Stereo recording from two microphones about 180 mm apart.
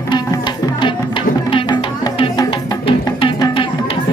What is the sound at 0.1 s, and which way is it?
Music, 25° left (ahead or behind).